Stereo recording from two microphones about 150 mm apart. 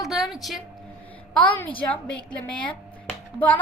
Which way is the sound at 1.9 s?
5° left (ahead or behind).